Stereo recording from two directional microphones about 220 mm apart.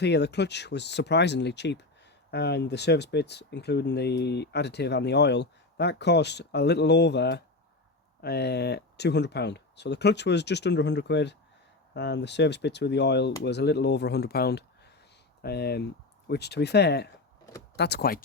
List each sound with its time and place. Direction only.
0.0 s speech: 50° left (ahead or behind)